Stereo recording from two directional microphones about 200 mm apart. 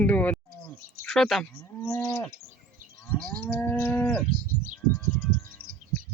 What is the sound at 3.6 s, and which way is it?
Livestock, 10° left (ahead or behind).